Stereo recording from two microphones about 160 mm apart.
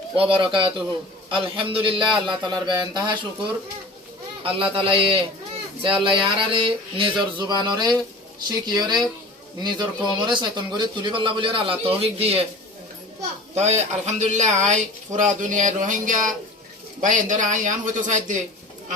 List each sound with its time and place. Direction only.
0.2 s a man's voice: 30° right (ahead or behind)
4.4 s a man's voice: 35° right (ahead or behind)
13.5 s speech: 45° right (ahead or behind)